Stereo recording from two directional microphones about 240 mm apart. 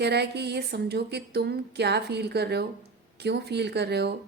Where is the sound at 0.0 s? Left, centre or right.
Right.